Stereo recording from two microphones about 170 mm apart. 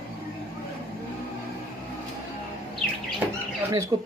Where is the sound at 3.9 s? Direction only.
20° right (ahead or behind).